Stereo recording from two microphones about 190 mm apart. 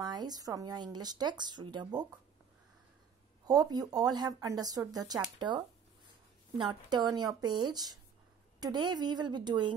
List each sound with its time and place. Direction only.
0.0 s speech: 20° right (ahead or behind)
3.4 s speech: 20° right (ahead or behind)
6.6 s speech: 20° right (ahead or behind)